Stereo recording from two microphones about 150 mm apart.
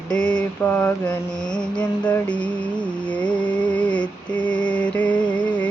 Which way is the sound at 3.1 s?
5° left (ahead or behind).